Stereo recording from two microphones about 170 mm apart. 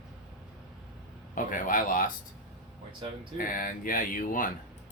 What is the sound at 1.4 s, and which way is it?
Speech, 55° left (ahead or behind).